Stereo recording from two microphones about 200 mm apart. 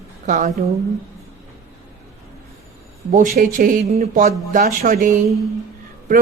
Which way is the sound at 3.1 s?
40° right (ahead or behind).